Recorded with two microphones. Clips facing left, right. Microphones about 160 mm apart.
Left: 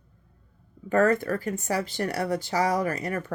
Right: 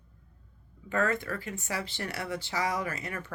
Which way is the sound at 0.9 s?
45° left (ahead or behind).